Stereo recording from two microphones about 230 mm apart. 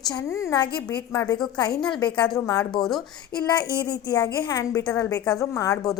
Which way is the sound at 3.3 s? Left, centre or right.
Left.